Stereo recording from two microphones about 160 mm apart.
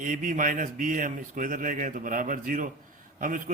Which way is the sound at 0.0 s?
55° right (ahead or behind).